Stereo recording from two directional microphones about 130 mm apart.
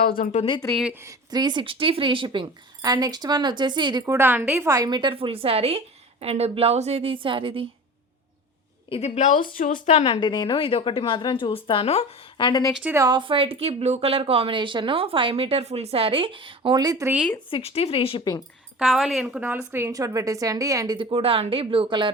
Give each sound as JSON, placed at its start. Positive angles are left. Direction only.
{"t": 0.1, "sound": "speech", "side_deg": 80}
{"t": 0.9, "sound": "speech", "side_deg": -25}
{"t": 4.0, "sound": "a woman's voice", "side_deg": -20}
{"t": 4.7, "sound": "speech", "side_deg": -30}
{"t": 8.9, "sound": "a woman's voice", "side_deg": 55}
{"t": 10.2, "sound": "a woman's voice", "side_deg": 35}
{"t": 12.9, "sound": "a woman's voice", "side_deg": -25}
{"t": 13.1, "sound": "speech", "side_deg": -40}
{"t": 17.5, "sound": "speech", "side_deg": 50}
{"t": 18.8, "sound": "a woman's voice", "side_deg": 0}
{"t": 21.1, "sound": "speech", "side_deg": -45}